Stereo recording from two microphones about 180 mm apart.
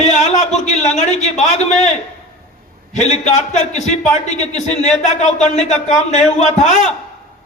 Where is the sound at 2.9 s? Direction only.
40° left (ahead or behind).